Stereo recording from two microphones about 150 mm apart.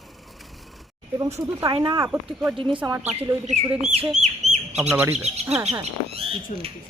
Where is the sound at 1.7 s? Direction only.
35° right (ahead or behind).